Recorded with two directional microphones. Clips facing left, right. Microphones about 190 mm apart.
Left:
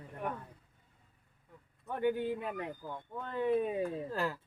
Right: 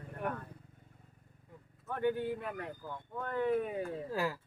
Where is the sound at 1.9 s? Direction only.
15° left (ahead or behind).